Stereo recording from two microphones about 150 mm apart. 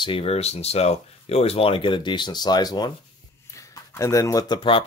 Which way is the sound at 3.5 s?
20° left (ahead or behind).